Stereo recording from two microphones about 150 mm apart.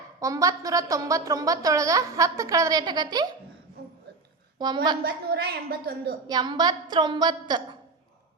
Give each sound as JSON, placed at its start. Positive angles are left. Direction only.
{"t": 0.2, "sound": "a woman's voice", "side_deg": -20}
{"t": 4.5, "sound": "a woman's voice", "side_deg": -30}
{"t": 5.0, "sound": "a woman's voice", "side_deg": -90}
{"t": 6.2, "sound": "a woman's voice", "side_deg": -30}